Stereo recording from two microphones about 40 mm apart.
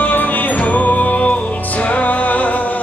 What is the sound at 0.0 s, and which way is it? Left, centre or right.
Music, left.